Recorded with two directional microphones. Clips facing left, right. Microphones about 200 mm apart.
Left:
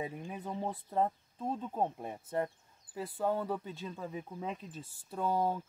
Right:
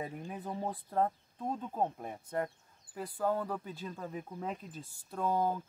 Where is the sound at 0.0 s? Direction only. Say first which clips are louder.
Left 1 dB; 15° left (ahead or behind).